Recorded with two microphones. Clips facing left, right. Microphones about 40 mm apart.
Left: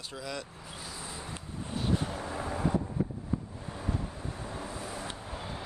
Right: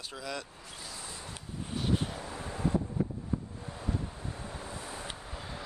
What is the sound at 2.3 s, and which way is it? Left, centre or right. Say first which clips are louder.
Vehicle: left 2 dB; left.